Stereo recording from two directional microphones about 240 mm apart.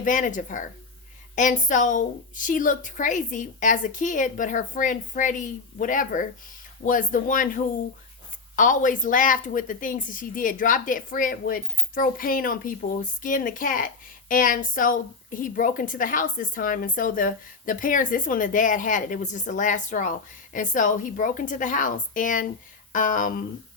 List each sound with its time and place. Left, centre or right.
0.0 s a woman's voice: left